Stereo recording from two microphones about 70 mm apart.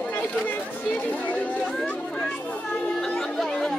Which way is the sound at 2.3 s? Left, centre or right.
Left.